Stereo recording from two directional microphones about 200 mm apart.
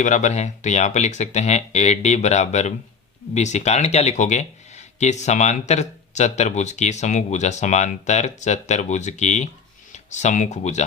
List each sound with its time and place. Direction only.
0.0 s speech: 35° left (ahead or behind)